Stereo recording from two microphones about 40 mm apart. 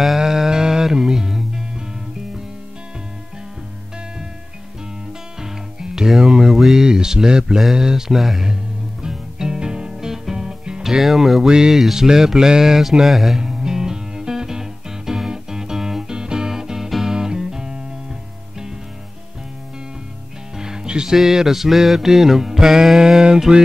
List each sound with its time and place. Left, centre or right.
0.2 s music: centre
5.4 s music: centre
13.4 s music: centre
20.5 s music: centre